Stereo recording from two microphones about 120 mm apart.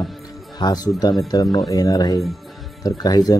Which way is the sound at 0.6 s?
35° left (ahead or behind).